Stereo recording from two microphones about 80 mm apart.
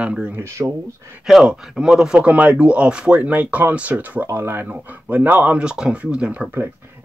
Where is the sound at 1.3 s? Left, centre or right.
Centre.